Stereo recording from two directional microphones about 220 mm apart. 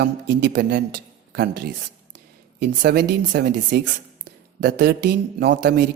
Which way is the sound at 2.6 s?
45° right (ahead or behind).